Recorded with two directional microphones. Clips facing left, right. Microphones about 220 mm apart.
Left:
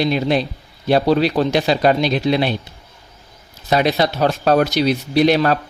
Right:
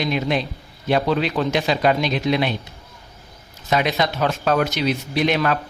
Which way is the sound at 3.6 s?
35° left (ahead or behind).